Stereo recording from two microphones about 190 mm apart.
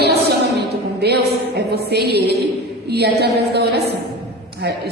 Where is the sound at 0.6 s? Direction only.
60° right (ahead or behind).